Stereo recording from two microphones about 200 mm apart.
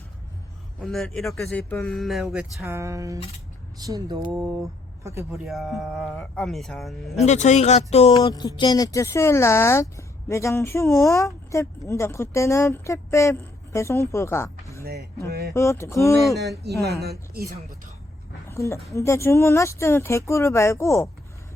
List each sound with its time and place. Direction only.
0.8 s speech: centre (ahead or behind); by 5.4 s 15° right (ahead or behind)
5.5 s speech: centre (ahead or behind)
7.3 s speech: 35° left (ahead or behind); by 14.8 s 15° left (ahead or behind)
15.3 s speech: 50° right (ahead or behind)
15.5 s speech: 15° left (ahead or behind)
16.8 s speech: 55° right (ahead or behind)
18.4 s speech: 15° left (ahead or behind)